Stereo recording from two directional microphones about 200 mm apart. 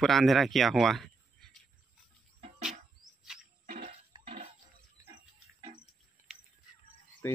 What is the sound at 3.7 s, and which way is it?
Music, 40° right (ahead or behind).